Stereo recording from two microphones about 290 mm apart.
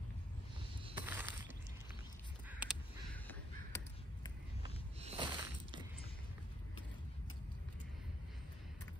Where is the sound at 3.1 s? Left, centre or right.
Centre.